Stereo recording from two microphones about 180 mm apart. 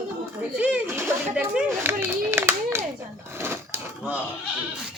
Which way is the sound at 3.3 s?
15° right (ahead or behind).